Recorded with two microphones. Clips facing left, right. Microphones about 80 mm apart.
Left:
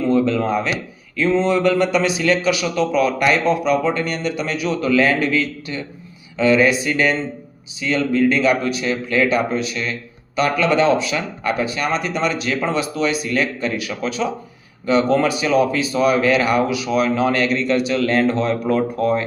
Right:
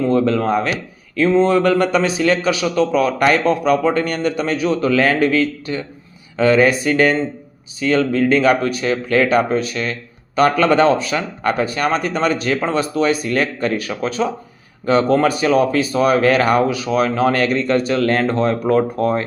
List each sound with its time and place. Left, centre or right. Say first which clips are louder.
0.0 s speech: right 1 dB; right